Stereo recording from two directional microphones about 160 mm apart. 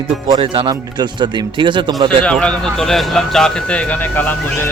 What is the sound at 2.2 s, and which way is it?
Speech, 5° left (ahead or behind).